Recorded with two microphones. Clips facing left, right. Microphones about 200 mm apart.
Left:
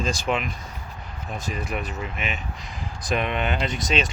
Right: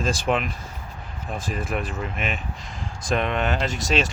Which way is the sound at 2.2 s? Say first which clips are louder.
Right 3 dB; 50° right (ahead or behind).